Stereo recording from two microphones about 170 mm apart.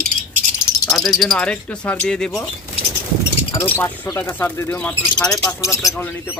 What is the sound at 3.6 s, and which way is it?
Speech, 15° left (ahead or behind).